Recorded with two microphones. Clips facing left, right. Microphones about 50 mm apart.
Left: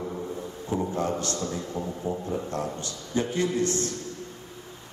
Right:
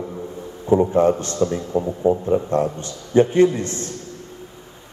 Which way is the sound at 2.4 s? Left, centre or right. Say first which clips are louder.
Right 10 dB; right.